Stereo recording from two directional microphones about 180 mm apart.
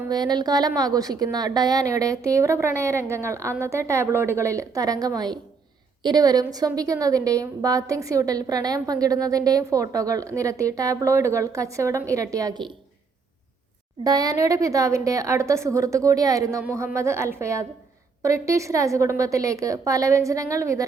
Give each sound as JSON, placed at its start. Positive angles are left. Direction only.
{"t": 0.1, "sound": "a woman's voice", "side_deg": -20}
{"t": 14.0, "sound": "a woman's voice", "side_deg": -20}